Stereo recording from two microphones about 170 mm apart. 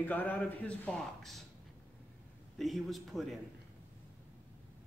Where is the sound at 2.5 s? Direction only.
Centre (ahead or behind).